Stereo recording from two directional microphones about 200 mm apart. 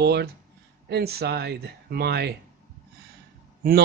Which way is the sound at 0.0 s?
55° right (ahead or behind).